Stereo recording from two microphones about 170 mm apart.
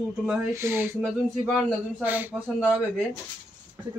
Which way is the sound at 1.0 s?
Centre (ahead or behind).